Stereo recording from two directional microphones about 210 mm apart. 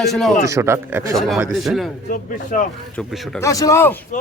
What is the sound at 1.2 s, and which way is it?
Speech, centre (ahead or behind).